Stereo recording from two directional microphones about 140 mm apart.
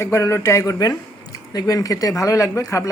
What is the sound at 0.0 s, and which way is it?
Speech, 20° left (ahead or behind).